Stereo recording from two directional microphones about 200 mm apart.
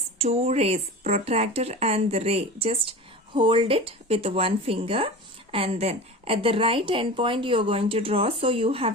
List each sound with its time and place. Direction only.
0.2 s speech: 30° right (ahead or behind)